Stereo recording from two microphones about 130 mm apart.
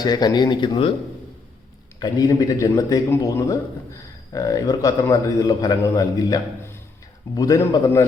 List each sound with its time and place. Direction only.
0.0 s speech: 30° left (ahead or behind)
2.0 s a man's voice: 30° left (ahead or behind)